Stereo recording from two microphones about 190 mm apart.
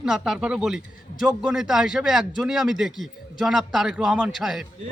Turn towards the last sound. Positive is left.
turn(degrees=0)  # may be behind; listen again after turning